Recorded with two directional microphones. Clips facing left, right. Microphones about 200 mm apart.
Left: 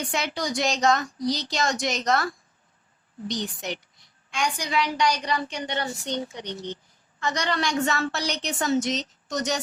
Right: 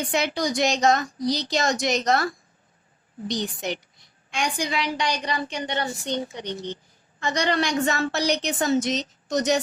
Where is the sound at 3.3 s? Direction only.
35° right (ahead or behind).